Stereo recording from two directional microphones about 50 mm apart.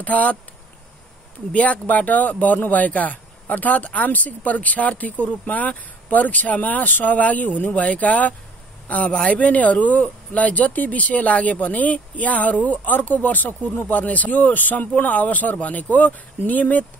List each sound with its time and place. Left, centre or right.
0.0 s speech: left
1.5 s a man's voice: left